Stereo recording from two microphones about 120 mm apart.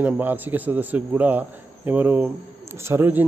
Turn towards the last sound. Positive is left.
turn(degrees=-15)  # may be behind; listen again after turning